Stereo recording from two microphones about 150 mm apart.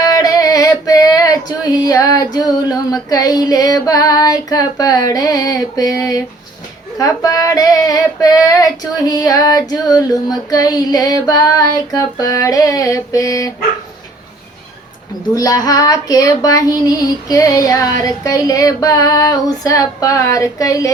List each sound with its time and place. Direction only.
0.0 s a sound: 25° left (ahead or behind)
7.0 s female singing: 25° left (ahead or behind)
15.4 s female singing: 25° left (ahead or behind)